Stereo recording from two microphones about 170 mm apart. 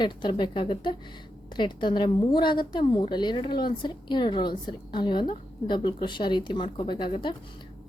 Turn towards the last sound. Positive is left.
turn(degrees=30)  # may be behind; listen again after turning